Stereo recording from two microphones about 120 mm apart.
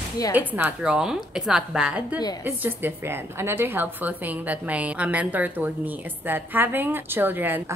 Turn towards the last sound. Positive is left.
turn(degrees=-15)  # may be behind; listen again after turning